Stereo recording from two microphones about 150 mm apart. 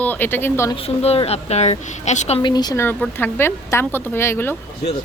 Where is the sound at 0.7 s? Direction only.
40° left (ahead or behind).